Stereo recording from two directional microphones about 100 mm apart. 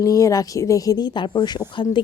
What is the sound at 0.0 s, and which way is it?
Speech, 35° left (ahead or behind).